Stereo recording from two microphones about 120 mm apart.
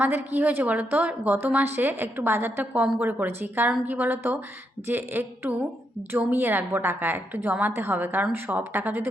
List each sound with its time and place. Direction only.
0.0 s a woman's voice: 15° right (ahead or behind)